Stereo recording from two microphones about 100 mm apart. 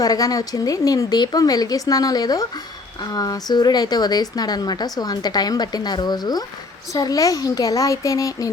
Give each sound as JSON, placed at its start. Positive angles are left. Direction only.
{"t": 0.0, "sound": "a woman's voice", "side_deg": 40}